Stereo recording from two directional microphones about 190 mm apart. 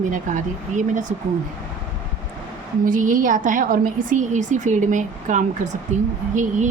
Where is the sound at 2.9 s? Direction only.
45° right (ahead or behind).